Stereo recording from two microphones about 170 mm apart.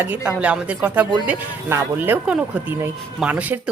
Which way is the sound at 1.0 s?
25° right (ahead or behind).